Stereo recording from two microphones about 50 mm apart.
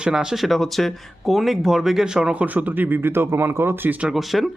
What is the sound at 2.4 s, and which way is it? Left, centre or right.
Speech, right.